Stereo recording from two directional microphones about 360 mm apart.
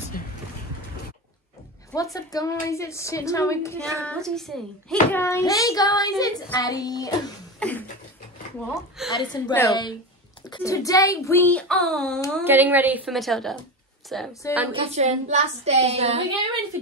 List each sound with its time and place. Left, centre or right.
0.2 s a sound: left
1.9 s a woman's voice: centre
9.1 s a woman's voice: centre
14.8 s a woman's voice: centre